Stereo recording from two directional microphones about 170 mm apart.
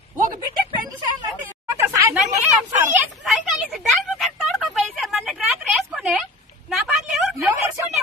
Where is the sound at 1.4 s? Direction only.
10° right (ahead or behind).